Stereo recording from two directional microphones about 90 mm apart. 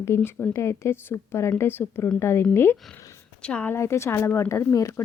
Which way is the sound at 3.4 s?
10° left (ahead or behind).